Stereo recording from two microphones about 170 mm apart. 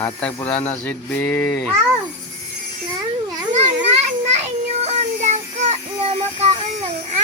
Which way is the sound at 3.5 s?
40° right (ahead or behind).